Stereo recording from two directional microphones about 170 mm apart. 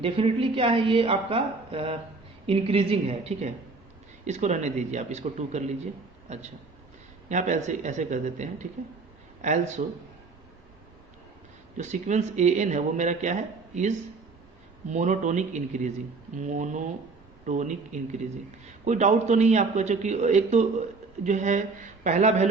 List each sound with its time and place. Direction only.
0.0 s a woman's voice: 35° right (ahead or behind)
11.8 s speech: 45° right (ahead or behind)